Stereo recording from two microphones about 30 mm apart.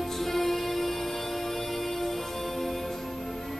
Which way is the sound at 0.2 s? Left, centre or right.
Centre.